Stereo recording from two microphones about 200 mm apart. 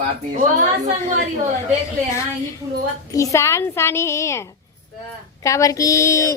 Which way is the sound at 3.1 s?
15° left (ahead or behind).